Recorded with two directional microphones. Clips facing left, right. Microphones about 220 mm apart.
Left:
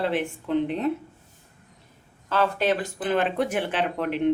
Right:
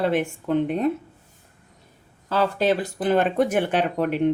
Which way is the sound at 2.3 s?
35° right (ahead or behind).